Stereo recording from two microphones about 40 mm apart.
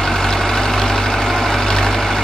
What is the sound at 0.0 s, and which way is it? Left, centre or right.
Vehicle, centre.